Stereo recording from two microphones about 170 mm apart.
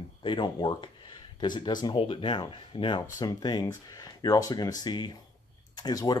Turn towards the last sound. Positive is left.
turn(degrees=25)  # may be behind; listen again after turning